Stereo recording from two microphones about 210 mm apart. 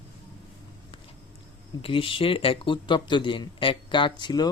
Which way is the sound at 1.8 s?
25° left (ahead or behind).